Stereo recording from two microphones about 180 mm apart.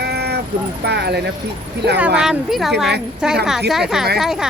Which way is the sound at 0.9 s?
65° right (ahead or behind).